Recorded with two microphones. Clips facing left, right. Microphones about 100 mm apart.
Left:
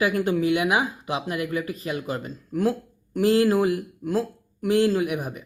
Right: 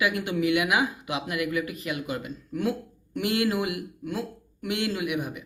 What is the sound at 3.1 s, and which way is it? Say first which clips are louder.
Speech: left 7 dB; 35° left (ahead or behind).